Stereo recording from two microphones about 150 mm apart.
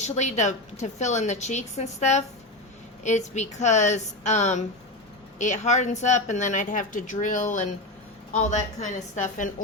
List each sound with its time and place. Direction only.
0.0 s a woman's voice: 50° left (ahead or behind)